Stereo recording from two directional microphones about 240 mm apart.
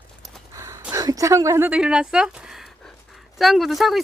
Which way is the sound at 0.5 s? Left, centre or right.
Centre.